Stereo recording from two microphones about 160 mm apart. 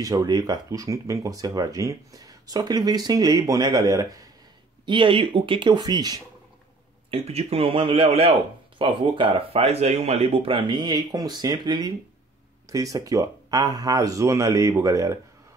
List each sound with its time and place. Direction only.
0.0 s speech: 20° right (ahead or behind)
7.1 s speech: 40° right (ahead or behind); by 15.1 s 20° right (ahead or behind)